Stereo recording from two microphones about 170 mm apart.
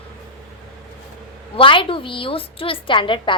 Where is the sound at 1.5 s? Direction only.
30° left (ahead or behind).